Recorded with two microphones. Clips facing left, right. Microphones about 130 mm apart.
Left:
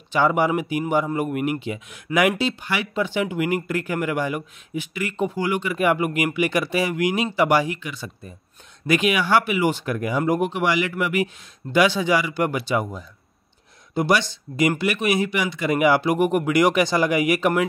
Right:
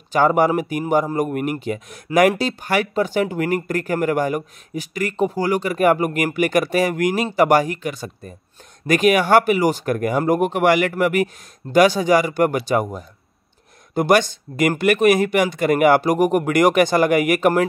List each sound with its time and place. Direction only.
0.1 s speech: 45° right (ahead or behind)